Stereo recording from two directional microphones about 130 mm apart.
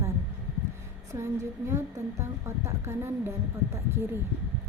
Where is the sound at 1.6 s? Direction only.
20° right (ahead or behind).